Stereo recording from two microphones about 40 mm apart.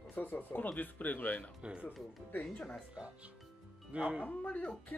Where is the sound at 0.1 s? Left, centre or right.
Left.